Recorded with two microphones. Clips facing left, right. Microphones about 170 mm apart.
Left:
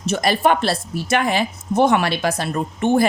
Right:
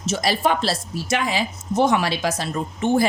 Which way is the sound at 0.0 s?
55° left (ahead or behind).